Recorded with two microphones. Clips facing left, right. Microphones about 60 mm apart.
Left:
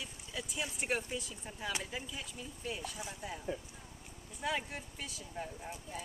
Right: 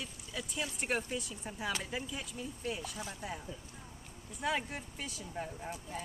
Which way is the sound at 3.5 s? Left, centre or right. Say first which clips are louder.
Left 7 dB; left.